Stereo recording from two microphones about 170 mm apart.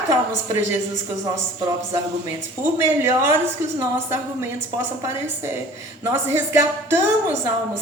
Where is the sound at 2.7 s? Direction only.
15° right (ahead or behind).